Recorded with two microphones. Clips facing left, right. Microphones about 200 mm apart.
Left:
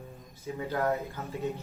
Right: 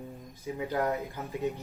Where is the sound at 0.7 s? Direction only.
15° right (ahead or behind).